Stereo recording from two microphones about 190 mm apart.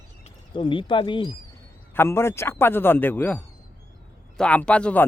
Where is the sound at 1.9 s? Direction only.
15° left (ahead or behind).